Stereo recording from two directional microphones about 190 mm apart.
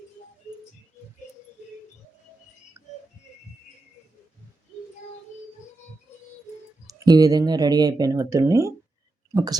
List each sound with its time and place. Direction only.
2.8 s music: 15° right (ahead or behind)
6.8 s speech: 20° right (ahead or behind)